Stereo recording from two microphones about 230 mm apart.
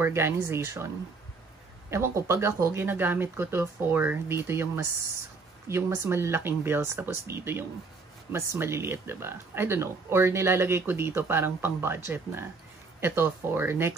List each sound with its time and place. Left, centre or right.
0.0 s speech: centre
1.9 s speech: centre
5.7 s speech: centre